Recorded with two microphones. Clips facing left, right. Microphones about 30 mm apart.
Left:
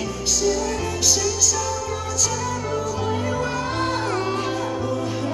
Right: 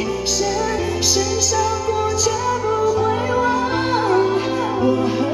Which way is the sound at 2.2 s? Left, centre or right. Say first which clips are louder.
Right 6 dB; centre.